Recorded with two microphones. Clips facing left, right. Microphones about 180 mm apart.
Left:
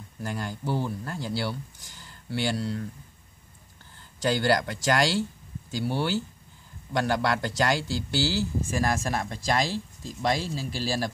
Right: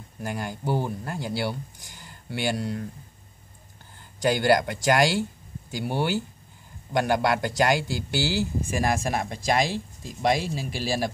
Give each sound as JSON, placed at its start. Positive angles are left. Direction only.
{"t": 0.2, "sound": "speech", "side_deg": -15}
{"t": 4.2, "sound": "a man's voice", "side_deg": -15}